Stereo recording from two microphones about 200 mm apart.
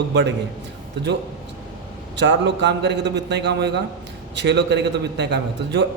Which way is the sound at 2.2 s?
60° right (ahead or behind).